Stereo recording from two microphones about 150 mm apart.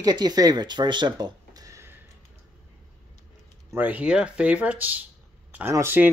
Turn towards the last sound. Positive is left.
turn(degrees=-15)  # may be behind; listen again after turning